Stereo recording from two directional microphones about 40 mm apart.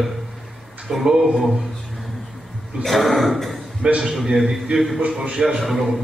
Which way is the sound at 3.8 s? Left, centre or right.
Centre.